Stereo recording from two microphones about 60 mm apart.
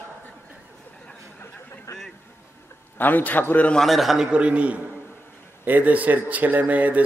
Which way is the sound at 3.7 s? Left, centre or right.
Centre.